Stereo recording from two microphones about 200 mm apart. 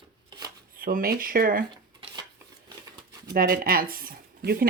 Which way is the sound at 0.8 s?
45° right (ahead or behind).